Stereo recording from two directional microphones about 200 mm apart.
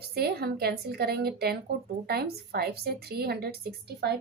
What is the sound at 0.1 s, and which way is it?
A woman's voice, 50° right (ahead or behind).